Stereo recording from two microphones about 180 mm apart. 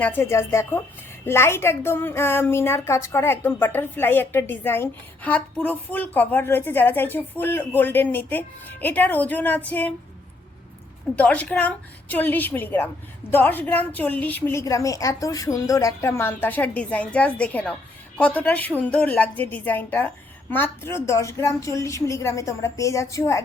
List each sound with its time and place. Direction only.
0.0 s a woman's voice: 10° left (ahead or behind)
11.2 s a woman's voice: 5° left (ahead or behind)